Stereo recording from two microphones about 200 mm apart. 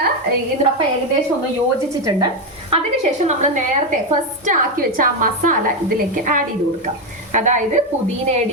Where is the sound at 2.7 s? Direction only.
35° right (ahead or behind).